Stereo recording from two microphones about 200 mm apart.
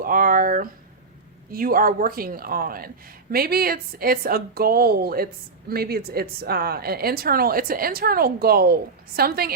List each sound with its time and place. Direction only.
0.0 s a woman's voice: 45° right (ahead or behind)